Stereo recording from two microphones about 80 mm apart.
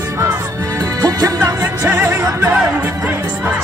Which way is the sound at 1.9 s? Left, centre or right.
Right.